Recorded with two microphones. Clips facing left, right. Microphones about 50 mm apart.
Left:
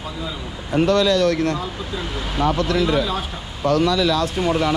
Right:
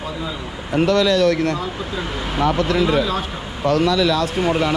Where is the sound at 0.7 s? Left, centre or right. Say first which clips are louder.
Right 1 dB; right.